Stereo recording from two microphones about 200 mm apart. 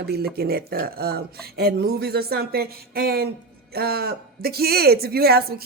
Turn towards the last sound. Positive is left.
turn(degrees=-50)  # may be behind; listen again after turning